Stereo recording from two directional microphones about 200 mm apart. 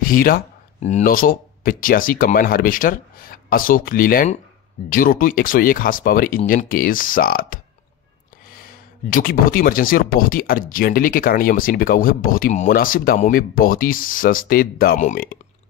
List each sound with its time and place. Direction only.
0.0 s speech: 45° left (ahead or behind)